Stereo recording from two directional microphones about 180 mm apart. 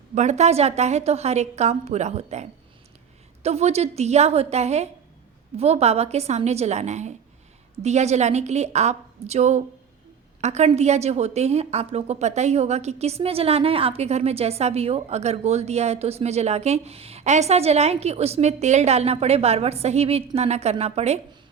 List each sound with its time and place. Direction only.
0.1 s a woman's voice: 40° right (ahead or behind)